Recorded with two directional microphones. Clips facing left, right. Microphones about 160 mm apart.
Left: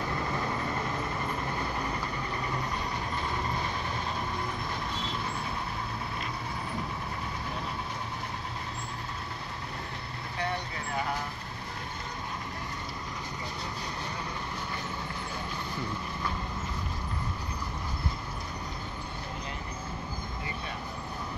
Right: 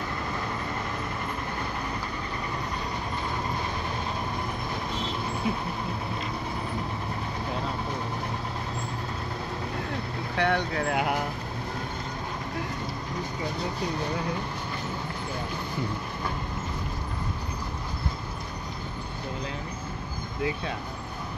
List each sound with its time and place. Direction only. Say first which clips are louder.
10.3 s vehicle: right 8 dB; 80° right